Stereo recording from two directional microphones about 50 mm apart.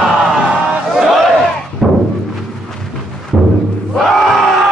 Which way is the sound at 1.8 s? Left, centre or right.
Centre.